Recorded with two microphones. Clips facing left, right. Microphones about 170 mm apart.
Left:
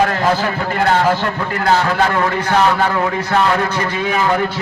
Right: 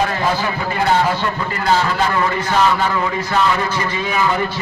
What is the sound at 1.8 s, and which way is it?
A man's voice, 65° left (ahead or behind).